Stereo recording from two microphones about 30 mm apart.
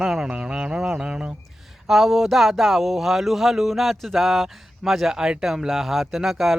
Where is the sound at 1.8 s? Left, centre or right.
Centre.